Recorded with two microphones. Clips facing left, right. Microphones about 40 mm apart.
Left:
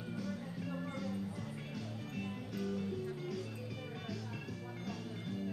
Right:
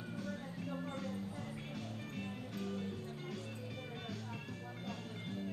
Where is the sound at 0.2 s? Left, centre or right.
Right.